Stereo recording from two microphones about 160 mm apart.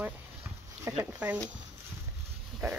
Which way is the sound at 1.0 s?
10° right (ahead or behind).